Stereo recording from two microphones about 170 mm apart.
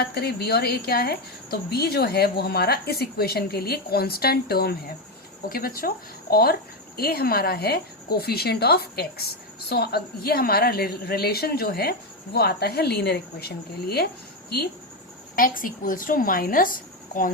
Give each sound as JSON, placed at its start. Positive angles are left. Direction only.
{"t": 0.0, "sound": "a woman's voice", "side_deg": 65}
{"t": 15.4, "sound": "a woman's voice", "side_deg": 55}